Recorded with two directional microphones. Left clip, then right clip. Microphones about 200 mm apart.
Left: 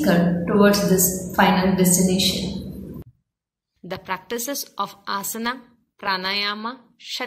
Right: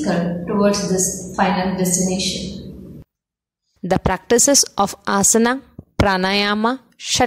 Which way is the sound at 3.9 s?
50° right (ahead or behind).